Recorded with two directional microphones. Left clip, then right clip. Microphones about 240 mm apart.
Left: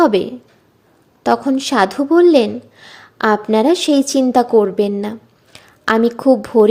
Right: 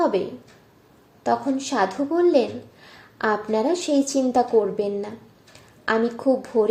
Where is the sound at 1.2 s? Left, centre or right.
Left.